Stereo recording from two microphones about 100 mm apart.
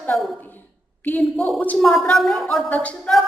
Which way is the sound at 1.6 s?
15° left (ahead or behind).